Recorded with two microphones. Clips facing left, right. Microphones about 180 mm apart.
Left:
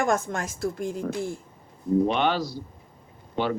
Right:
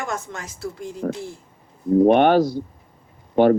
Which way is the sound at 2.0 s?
50° right (ahead or behind).